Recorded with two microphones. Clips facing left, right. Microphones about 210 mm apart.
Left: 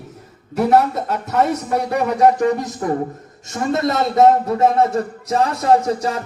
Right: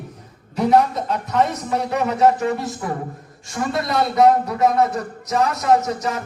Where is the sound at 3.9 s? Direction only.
25° left (ahead or behind).